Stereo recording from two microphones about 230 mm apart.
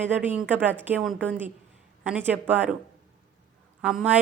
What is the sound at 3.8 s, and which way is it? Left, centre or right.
Speech, centre.